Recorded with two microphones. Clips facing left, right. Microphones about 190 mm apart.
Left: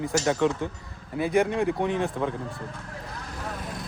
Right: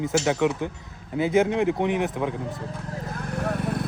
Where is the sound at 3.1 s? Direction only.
60° right (ahead or behind).